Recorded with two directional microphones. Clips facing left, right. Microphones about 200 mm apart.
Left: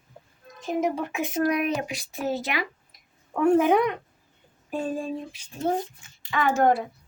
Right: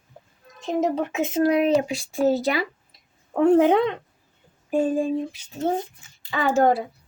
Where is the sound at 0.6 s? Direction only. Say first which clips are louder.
Right 3 dB; 25° right (ahead or behind).